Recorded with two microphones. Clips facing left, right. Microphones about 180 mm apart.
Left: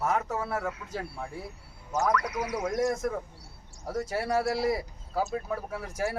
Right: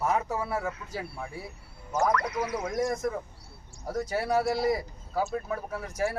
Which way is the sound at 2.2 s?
10° left (ahead or behind).